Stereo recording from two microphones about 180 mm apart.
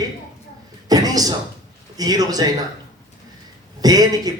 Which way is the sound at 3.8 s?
20° right (ahead or behind).